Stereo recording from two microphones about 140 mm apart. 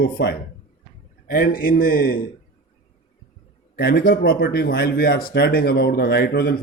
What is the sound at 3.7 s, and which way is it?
Speech, 90° left.